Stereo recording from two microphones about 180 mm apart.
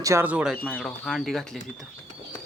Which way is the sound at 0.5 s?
5° left (ahead or behind).